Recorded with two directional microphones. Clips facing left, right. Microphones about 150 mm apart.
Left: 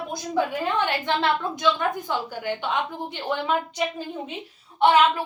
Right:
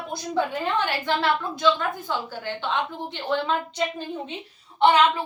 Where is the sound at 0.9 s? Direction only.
20° left (ahead or behind).